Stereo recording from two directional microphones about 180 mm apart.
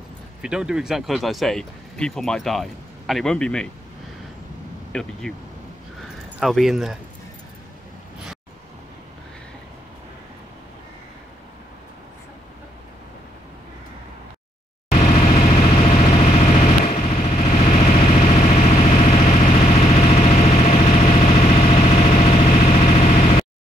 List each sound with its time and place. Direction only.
0.4 s speech: 5° right (ahead or behind)
4.9 s speech: 5° left (ahead or behind)
6.4 s speech: centre (ahead or behind)
14.9 s vehicle: 40° left (ahead or behind)